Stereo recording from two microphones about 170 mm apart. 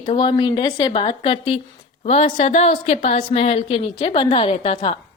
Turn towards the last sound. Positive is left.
turn(degrees=30)  # may be behind; listen again after turning